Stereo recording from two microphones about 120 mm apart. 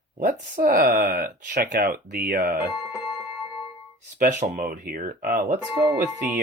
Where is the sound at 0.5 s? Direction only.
90° right.